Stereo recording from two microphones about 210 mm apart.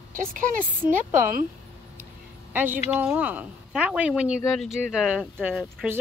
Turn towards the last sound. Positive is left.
turn(degrees=-5)  # may be behind; listen again after turning